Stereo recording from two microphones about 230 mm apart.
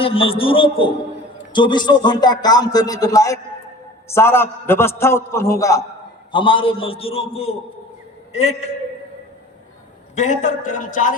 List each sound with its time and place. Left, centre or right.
0.0 s a man's voice: left
10.2 s a man's voice: left